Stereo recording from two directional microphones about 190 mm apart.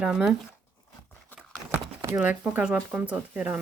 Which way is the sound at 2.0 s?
10° right (ahead or behind).